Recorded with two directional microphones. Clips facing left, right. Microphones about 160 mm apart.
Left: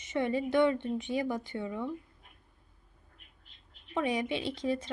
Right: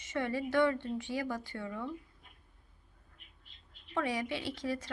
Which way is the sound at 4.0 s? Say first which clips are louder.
Left 3 dB; 20° left (ahead or behind).